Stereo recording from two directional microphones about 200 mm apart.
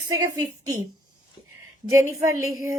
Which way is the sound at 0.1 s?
15° right (ahead or behind).